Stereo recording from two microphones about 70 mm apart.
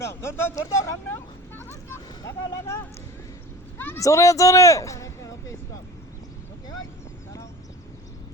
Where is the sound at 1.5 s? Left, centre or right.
Left.